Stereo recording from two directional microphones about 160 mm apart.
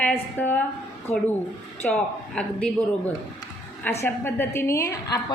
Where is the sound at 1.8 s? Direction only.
5° left (ahead or behind).